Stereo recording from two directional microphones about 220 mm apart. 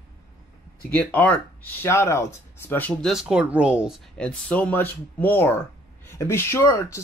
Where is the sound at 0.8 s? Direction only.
5° left (ahead or behind).